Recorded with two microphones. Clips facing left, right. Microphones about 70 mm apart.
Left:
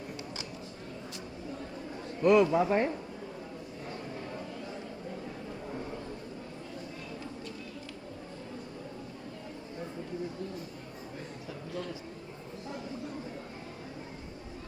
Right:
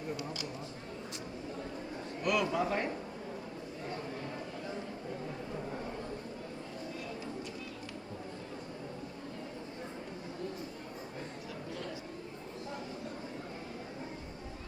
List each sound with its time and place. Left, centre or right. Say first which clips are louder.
2.2 s a man's voice: left 8 dB; left